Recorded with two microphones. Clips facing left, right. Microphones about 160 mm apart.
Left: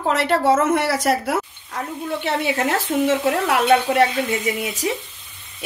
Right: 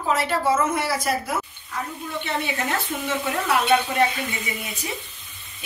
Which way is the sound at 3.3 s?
65° left (ahead or behind).